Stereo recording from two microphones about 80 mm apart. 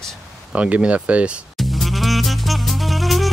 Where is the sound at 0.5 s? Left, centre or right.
Centre.